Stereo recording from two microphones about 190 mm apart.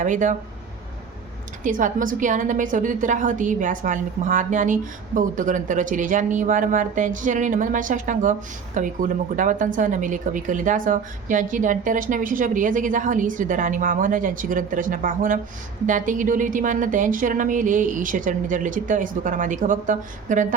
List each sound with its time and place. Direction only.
0.0 s a woman's voice: 40° right (ahead or behind)
1.6 s a woman's voice: 45° right (ahead or behind)